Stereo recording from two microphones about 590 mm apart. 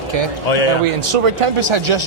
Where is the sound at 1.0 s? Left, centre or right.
Right.